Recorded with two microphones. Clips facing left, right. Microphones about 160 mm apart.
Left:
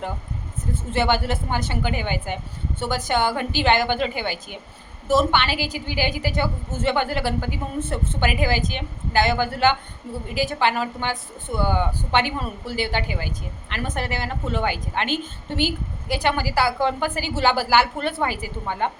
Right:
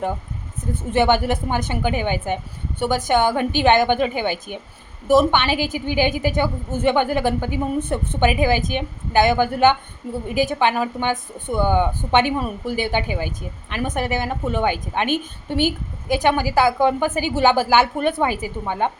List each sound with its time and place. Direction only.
0.7 s a woman's voice: 15° right (ahead or behind)